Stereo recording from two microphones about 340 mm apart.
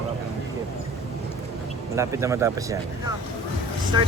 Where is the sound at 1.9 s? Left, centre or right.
Centre.